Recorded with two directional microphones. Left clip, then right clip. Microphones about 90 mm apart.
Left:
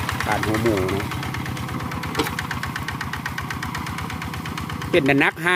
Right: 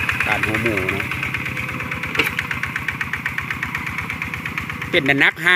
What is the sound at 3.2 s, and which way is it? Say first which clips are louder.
Engine: right 5 dB; 25° left (ahead or behind).